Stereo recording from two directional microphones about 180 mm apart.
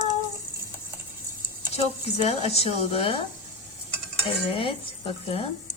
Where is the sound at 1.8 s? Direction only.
35° left (ahead or behind).